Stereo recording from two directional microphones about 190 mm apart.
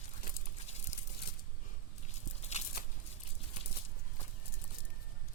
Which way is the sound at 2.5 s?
35° left (ahead or behind).